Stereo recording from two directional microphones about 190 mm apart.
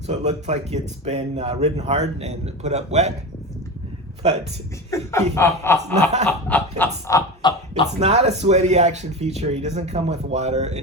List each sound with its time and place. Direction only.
0.1 s speech: 35° right (ahead or behind)
4.9 s a sound: 15° left (ahead or behind)
7.4 s speech: 25° left (ahead or behind)
7.9 s speech: 35° right (ahead or behind)